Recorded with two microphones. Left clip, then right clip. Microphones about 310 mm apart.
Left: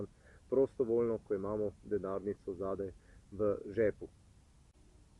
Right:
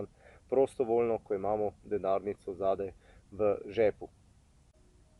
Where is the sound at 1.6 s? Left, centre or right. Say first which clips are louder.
Right 3 dB; right.